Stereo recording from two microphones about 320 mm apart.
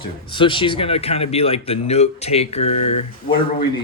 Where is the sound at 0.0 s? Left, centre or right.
Centre.